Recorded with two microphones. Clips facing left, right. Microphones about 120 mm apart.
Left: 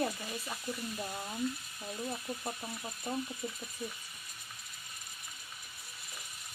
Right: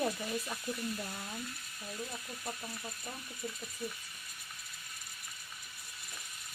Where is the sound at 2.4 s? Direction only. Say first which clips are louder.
Left 2 dB; 20° left (ahead or behind).